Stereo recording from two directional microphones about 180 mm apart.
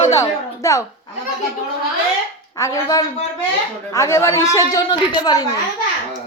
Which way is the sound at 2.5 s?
20° left (ahead or behind).